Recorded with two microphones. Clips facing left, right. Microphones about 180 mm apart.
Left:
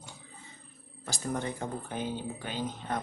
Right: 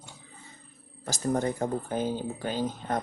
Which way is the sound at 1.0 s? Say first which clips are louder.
Right 6 dB; 45° right (ahead or behind).